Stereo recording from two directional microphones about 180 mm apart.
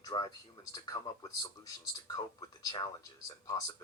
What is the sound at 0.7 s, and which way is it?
Speech, 20° left (ahead or behind).